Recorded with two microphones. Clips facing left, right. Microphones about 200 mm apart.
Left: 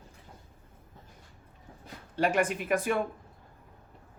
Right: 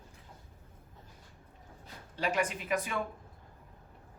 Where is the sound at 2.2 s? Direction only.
50° left (ahead or behind).